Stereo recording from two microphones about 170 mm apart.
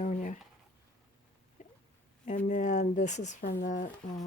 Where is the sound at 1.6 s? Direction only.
45° left (ahead or behind).